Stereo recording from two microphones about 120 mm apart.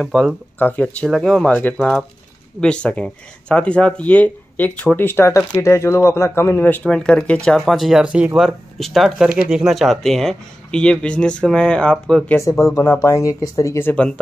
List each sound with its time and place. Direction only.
0.0 s speech: centre (ahead or behind)
0.6 s speech: 10° left (ahead or behind)
1.1 s speech: centre (ahead or behind)
1.5 s speech: 15° left (ahead or behind)